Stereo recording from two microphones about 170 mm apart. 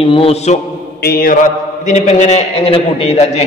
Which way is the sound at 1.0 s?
60° left (ahead or behind).